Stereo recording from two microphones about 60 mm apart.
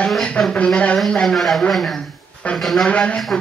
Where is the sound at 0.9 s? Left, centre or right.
Centre.